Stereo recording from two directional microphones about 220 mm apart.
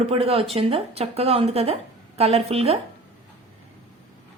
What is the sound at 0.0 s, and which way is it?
A woman's voice, 25° right (ahead or behind).